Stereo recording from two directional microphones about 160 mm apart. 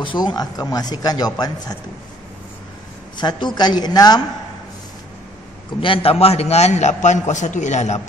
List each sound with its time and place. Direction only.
0.0 s speech: 30° left (ahead or behind)
3.2 s speech: 25° left (ahead or behind)
5.8 s a man's voice: 35° left (ahead or behind)